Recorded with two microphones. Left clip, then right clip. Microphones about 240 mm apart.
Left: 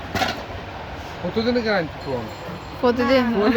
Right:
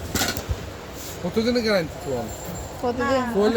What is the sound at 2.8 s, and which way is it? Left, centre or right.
Speech, left.